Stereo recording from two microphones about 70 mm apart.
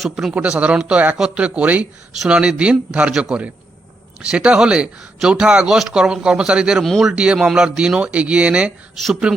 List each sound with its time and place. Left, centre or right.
0.0 s a man's voice: centre
0.3 s speech: centre
6.8 s a man's voice: centre
7.1 s speech: centre